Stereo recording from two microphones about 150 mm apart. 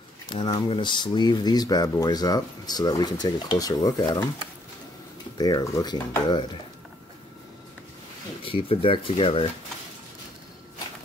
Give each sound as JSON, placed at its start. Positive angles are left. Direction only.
{"t": 0.3, "sound": "speech", "side_deg": 30}
{"t": 5.4, "sound": "speech", "side_deg": 25}
{"t": 8.5, "sound": "speech", "side_deg": 35}